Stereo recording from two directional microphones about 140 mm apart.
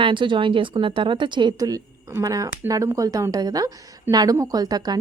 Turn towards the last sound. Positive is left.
turn(degrees=-30)  # may be behind; listen again after turning